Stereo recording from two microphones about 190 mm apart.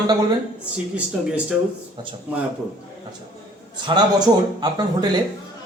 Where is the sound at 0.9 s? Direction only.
5° right (ahead or behind).